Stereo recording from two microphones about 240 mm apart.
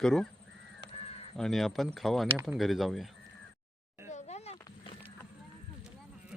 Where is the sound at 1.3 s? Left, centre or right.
Centre.